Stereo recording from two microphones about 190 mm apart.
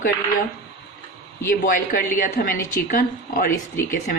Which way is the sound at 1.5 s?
50° left (ahead or behind).